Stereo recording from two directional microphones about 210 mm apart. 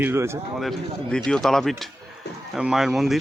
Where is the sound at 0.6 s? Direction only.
Centre (ahead or behind).